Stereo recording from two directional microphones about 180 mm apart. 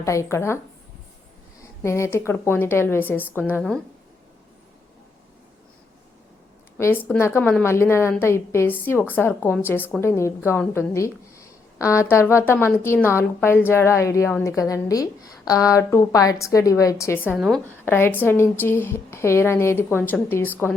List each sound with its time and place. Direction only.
0.0 s speech: 15° left (ahead or behind)
1.8 s speech: 15° left (ahead or behind)
6.7 s a woman's voice: 15° left (ahead or behind)
17.3 s a woman's voice: centre (ahead or behind)
17.8 s speech: 10° left (ahead or behind)